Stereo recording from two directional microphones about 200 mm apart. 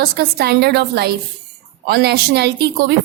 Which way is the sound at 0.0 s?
50° right (ahead or behind).